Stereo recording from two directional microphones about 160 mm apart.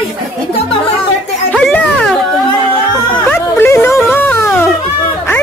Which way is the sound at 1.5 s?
5° left (ahead or behind).